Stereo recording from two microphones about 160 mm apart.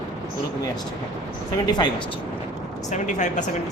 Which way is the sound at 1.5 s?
25° left (ahead or behind).